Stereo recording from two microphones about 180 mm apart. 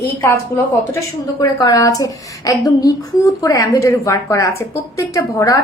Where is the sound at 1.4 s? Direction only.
20° left (ahead or behind).